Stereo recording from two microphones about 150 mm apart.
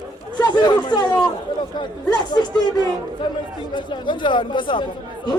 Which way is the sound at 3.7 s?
30° left (ahead or behind).